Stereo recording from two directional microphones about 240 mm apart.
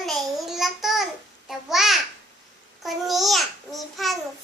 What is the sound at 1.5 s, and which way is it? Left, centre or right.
Babbling, centre.